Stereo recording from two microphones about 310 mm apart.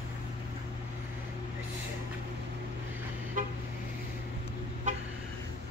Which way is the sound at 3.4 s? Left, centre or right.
Right.